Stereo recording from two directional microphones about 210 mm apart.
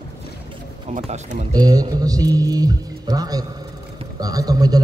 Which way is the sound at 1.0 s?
30° right (ahead or behind).